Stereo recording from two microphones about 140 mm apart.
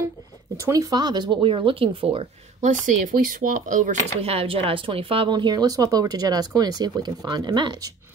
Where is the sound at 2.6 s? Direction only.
75° right (ahead or behind).